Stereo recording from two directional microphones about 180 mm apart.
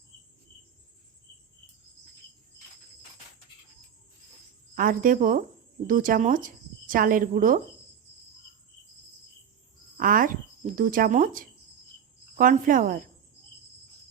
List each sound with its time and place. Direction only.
4.7 s speech: 50° right (ahead or behind)
10.0 s speech: 50° right (ahead or behind)